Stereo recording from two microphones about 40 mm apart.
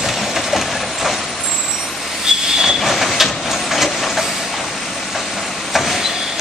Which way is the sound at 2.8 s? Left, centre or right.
Centre.